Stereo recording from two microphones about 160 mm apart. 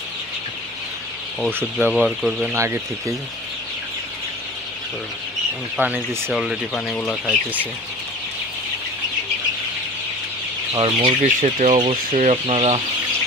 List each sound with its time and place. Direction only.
1.5 s speech: 15° right (ahead or behind)
1.9 s speech: 5° left (ahead or behind)
2.5 s speech: 20° right (ahead or behind)
5.8 s speech: 10° right (ahead or behind)
6.7 s speech: 5° left (ahead or behind)
10.8 s speech: 30° right (ahead or behind)
11.3 s speech: 45° right (ahead or behind)
11.8 s speech: 35° right (ahead or behind)